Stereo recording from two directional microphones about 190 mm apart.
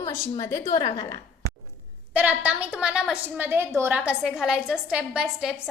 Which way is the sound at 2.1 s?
10° right (ahead or behind).